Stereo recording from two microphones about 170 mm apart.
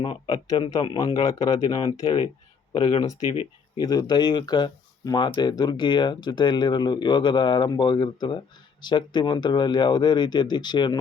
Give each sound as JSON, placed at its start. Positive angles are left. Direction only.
{"t": 0.0, "sound": "speech", "side_deg": 30}